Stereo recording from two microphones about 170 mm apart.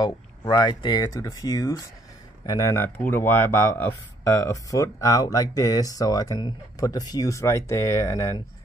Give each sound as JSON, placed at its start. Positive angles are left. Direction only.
{"t": 0.0, "sound": "speech", "side_deg": 25}